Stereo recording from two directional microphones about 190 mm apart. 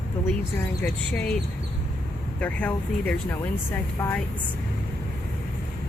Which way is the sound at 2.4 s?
10° left (ahead or behind).